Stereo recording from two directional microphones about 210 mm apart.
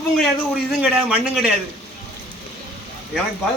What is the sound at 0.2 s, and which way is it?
A man's voice, 5° right (ahead or behind).